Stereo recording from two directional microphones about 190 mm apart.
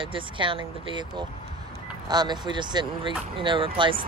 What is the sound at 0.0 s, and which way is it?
Speech, 25° right (ahead or behind).